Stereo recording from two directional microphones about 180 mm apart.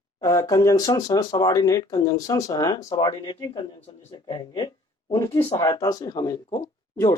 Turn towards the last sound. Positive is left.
turn(degrees=20)  # may be behind; listen again after turning